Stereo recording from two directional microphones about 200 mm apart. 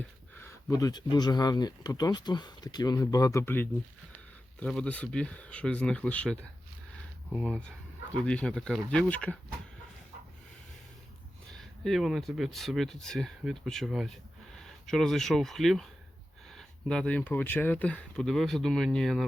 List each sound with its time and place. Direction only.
0.3 s speech: 15° left (ahead or behind)
11.5 s speech: centre (ahead or behind)